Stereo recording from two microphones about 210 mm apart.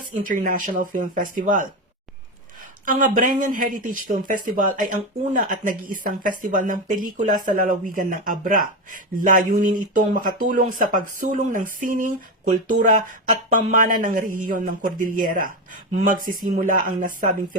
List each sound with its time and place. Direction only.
0.1 s speech: 40° right (ahead or behind)
2.8 s speech: 40° right (ahead or behind)